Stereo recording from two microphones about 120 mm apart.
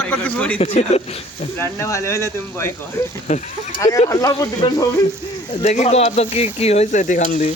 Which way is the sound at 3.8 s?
25° left (ahead or behind).